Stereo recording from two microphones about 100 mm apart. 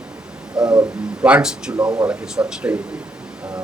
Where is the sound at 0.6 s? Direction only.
10° right (ahead or behind).